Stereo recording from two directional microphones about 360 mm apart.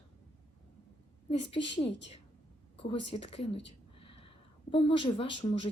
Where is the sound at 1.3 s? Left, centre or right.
Centre.